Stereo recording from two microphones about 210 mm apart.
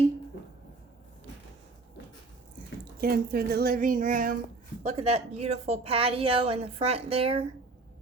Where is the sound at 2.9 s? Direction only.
45° right (ahead or behind); by 7.5 s 30° right (ahead or behind).